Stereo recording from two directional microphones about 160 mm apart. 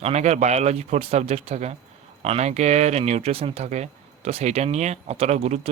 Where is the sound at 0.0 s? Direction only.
45° right (ahead or behind).